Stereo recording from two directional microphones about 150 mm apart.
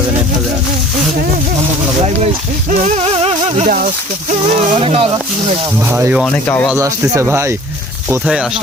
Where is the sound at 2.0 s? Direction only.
45° right (ahead or behind).